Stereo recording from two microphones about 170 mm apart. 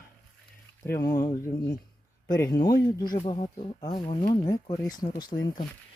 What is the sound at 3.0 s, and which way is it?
Speech, 55° left (ahead or behind).